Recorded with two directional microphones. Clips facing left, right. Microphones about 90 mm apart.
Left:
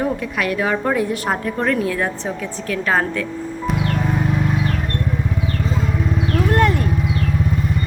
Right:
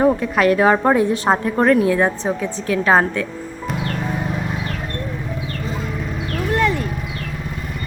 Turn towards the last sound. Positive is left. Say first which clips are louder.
# left 1 dB
turn(degrees=50)  # may be behind; listen again after turning